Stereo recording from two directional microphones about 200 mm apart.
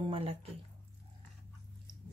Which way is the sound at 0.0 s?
25° right (ahead or behind).